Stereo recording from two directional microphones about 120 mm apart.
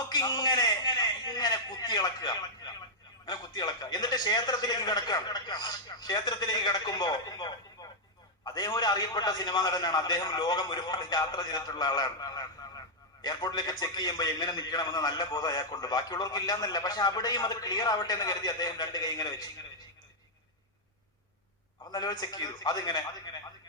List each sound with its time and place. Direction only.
0.1 s a sound: 35° left (ahead or behind)
3.2 s a man's voice: 35° left (ahead or behind)
21.8 s a man's voice: 35° left (ahead or behind)